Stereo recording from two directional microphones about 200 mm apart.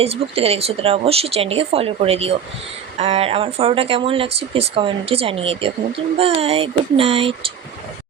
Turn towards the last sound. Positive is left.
turn(degrees=-30)  # may be behind; listen again after turning